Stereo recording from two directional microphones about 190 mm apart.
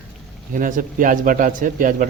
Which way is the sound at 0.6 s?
45° right (ahead or behind).